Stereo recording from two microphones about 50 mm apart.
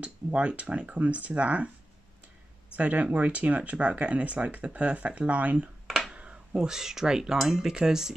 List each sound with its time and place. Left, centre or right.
0.0 s speech: right
2.7 s speech: right
5.9 s computer keyboard: centre
6.1 s speech: right